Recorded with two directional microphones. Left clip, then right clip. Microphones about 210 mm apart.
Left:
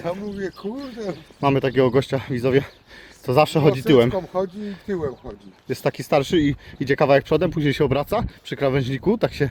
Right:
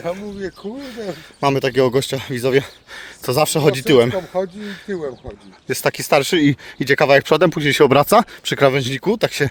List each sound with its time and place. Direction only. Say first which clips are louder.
0.0 s speech: right 2 dB; 5° right (ahead or behind)
1.4 s speech: right 3 dB; 45° right (ahead or behind)
4.9 s speech: right 1 dB; 5° right (ahead or behind)
5.6 s speech: right 5 dB; 45° right (ahead or behind)